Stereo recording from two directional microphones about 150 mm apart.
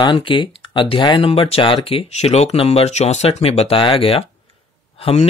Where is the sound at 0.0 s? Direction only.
30° left (ahead or behind).